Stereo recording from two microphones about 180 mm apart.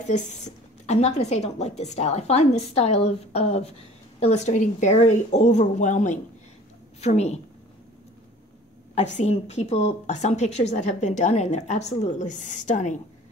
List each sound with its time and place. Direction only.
0.8 s a woman's voice: 35° left (ahead or behind)
8.9 s a woman's voice: 40° left (ahead or behind)